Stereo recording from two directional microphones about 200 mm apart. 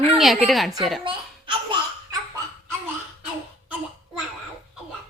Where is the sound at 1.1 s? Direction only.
25° right (ahead or behind).